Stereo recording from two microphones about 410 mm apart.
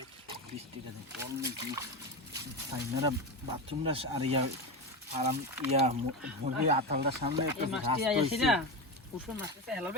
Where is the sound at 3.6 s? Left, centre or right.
Centre.